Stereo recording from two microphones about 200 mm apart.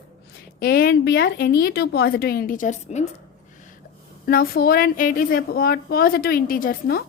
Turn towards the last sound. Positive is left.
turn(degrees=45)  # may be behind; listen again after turning